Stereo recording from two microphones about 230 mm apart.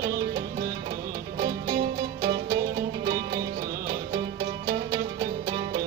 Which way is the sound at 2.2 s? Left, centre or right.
Centre.